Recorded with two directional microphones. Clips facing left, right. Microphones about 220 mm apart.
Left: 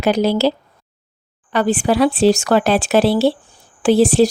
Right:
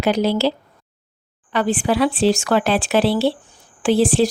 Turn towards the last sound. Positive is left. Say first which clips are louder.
# left 4 dB
turn(degrees=40)  # may be behind; listen again after turning